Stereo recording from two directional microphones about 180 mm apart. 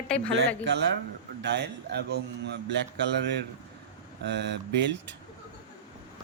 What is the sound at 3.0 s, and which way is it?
Speech, 80° right.